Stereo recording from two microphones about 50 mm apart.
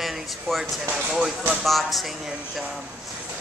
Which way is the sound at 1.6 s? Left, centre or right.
Centre.